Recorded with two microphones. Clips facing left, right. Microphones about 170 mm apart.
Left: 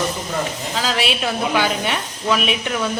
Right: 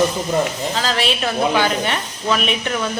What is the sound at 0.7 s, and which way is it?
A woman's voice, 5° left (ahead or behind).